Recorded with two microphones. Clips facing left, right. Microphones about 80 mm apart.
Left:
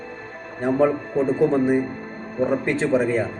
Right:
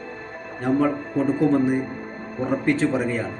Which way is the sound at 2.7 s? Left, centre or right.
Left.